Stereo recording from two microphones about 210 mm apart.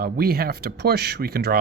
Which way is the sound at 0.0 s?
45° right (ahead or behind).